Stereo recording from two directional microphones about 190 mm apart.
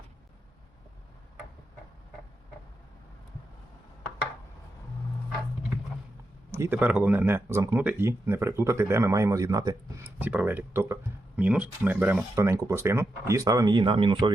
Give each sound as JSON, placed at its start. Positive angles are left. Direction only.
{"t": 6.5, "sound": "speech", "side_deg": -10}